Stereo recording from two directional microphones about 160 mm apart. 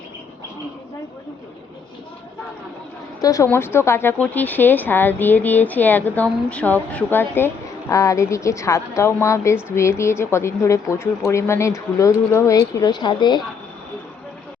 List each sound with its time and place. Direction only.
3.2 s speech: 20° left (ahead or behind)